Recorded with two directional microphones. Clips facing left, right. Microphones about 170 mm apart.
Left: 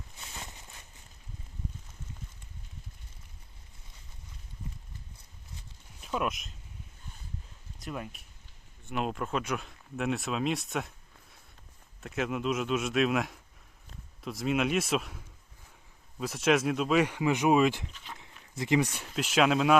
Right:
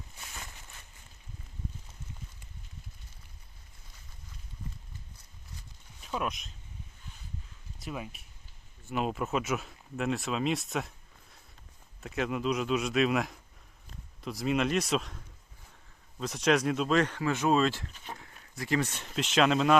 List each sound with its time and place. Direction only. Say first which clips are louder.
6.0 s speech: left 2 dB; centre (ahead or behind)
7.8 s speech: even; centre (ahead or behind); by 17.9 s 15° left (ahead or behind)
17.9 s speech: right 3 dB; 45° right (ahead or behind)
18.2 s speech: left 3 dB; 20° left (ahead or behind); by 19.7 s 5° left (ahead or behind)